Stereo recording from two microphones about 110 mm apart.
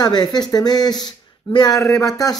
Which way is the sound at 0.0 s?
40° left (ahead or behind).